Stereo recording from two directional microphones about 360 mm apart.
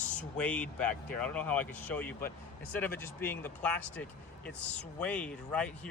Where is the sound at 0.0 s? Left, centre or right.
Centre.